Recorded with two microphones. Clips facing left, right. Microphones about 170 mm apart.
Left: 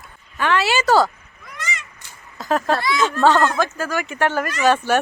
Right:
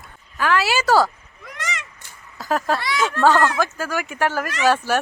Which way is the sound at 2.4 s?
5° right (ahead or behind).